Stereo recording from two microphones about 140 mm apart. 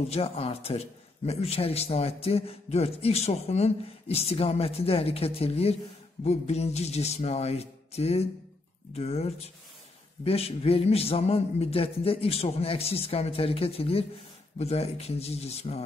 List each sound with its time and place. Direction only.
0.1 s a man's voice: 45° left (ahead or behind)